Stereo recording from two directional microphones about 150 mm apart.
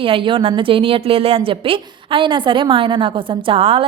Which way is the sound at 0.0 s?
35° right (ahead or behind).